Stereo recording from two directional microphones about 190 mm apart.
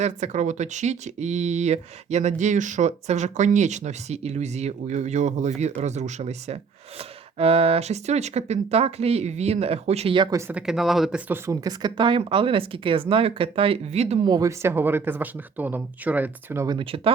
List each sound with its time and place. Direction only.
0.0 s speech: 40° right (ahead or behind)
10.3 s speech: 5° right (ahead or behind); by 14.2 s 35° right (ahead or behind)
14.3 s speech: 20° right (ahead or behind)
16.7 s speech: 30° right (ahead or behind)